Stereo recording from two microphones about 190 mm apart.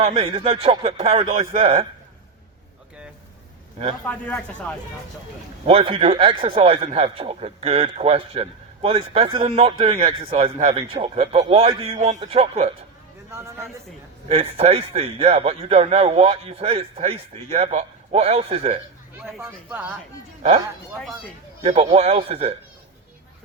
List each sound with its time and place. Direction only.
0.0 s speech: 30° right (ahead or behind)
4.0 s speech: 5° left (ahead or behind)
5.6 s a man's voice: 30° right (ahead or behind)
13.3 s speech: 15° right (ahead or behind)
14.3 s a man's voice: 30° right (ahead or behind)
19.4 s speech: 10° right (ahead or behind)
21.6 s a man's voice: 35° right (ahead or behind)